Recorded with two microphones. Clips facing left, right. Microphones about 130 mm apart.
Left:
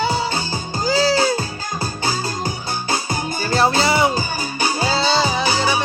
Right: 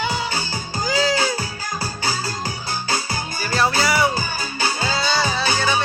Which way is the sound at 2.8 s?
20° left (ahead or behind).